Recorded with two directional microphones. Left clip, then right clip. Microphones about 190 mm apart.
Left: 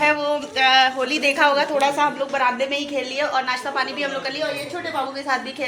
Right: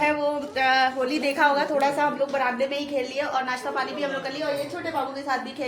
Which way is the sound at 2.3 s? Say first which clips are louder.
Left 4 dB; 25° left (ahead or behind).